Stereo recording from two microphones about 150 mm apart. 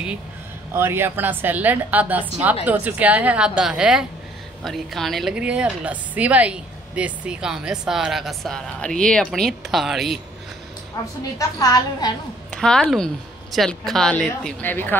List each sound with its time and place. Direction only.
0.7 s a woman's voice: 15° right (ahead or behind)
11.0 s a woman's voice: 25° left (ahead or behind)
12.4 s a woman's voice: 5° left (ahead or behind)